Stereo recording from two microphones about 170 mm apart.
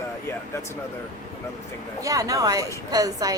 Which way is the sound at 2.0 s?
20° right (ahead or behind).